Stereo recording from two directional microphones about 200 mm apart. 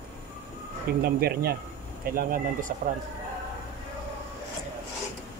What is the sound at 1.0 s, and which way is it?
Speech, 50° right (ahead or behind).